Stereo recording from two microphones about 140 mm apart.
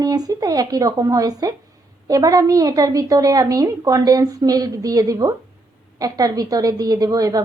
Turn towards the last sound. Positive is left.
turn(degrees=-25)  # may be behind; listen again after turning